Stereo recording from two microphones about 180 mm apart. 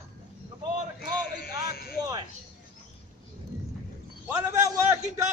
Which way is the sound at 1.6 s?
60° left (ahead or behind).